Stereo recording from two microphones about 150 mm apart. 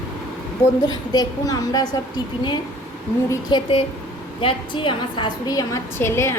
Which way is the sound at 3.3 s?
30° left (ahead or behind).